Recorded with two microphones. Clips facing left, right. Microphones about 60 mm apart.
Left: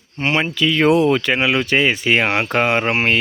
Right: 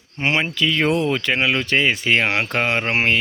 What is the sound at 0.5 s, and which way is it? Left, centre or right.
Speech, centre.